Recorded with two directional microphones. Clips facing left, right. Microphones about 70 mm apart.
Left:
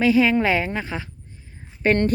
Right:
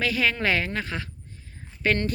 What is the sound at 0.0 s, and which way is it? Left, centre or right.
A woman's voice, centre.